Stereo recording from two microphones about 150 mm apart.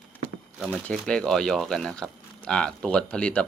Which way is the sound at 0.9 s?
5° left (ahead or behind).